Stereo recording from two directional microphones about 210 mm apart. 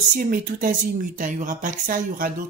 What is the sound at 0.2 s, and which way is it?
Speech, 40° right (ahead or behind).